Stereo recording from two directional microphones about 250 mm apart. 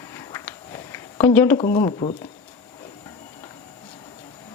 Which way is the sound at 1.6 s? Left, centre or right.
Centre.